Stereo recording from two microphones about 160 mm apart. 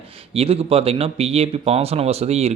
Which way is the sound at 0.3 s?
35° right (ahead or behind).